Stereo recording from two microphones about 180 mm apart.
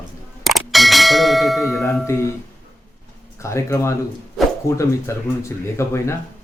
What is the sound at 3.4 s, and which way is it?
Speech, 15° left (ahead or behind).